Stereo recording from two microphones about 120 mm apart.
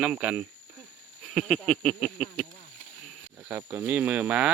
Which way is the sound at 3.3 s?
20° right (ahead or behind).